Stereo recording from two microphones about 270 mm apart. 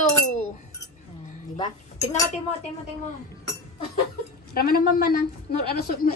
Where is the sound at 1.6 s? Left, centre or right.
Centre.